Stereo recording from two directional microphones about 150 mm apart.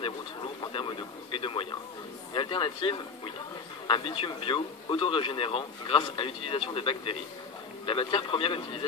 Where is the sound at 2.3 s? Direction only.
35° left (ahead or behind).